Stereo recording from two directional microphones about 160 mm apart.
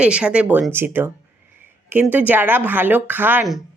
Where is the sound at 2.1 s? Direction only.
10° right (ahead or behind).